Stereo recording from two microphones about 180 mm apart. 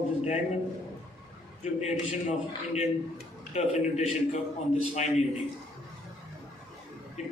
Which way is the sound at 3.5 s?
40° left (ahead or behind).